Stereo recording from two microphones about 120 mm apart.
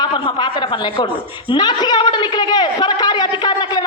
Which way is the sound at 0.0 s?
40° left (ahead or behind).